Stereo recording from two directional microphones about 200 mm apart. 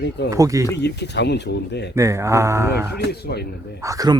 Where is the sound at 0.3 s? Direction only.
15° right (ahead or behind).